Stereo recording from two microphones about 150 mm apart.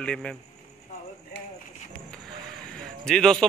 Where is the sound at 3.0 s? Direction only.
5° left (ahead or behind).